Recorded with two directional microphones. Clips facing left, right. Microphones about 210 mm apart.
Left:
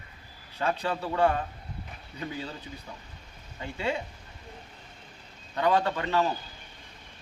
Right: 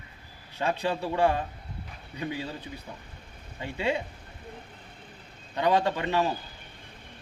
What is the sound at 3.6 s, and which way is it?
Speech, 15° right (ahead or behind).